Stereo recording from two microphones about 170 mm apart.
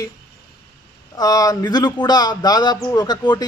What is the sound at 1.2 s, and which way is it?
A man's voice, 20° left (ahead or behind).